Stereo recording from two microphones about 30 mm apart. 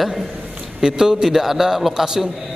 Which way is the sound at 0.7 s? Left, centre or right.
Right.